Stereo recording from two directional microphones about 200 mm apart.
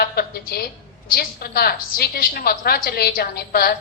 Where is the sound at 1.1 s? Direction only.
50° left (ahead or behind).